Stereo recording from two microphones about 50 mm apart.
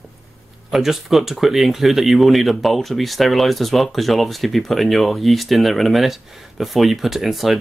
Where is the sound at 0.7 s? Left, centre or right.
Centre.